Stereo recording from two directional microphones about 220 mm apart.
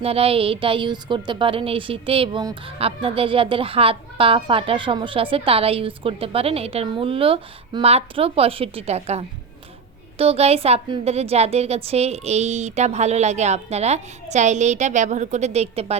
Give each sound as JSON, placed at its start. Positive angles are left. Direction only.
{"t": 0.0, "sound": "a woman's voice", "side_deg": -25}